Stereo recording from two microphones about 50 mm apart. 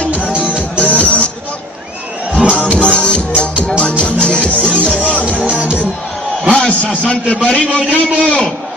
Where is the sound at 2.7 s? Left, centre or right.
Left.